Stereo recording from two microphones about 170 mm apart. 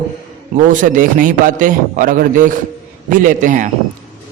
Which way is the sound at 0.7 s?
50° right (ahead or behind).